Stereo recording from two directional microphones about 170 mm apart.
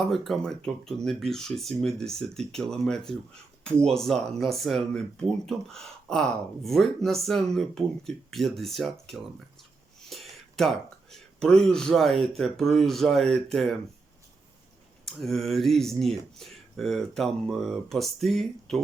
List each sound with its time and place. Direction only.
0.1 s speech: centre (ahead or behind)
15.0 s speech: centre (ahead or behind)